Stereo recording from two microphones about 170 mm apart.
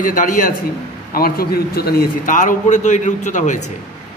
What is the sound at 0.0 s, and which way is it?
A man's voice, 50° left (ahead or behind).